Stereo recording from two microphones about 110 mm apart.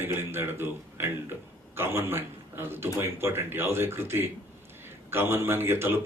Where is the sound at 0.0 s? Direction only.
20° right (ahead or behind).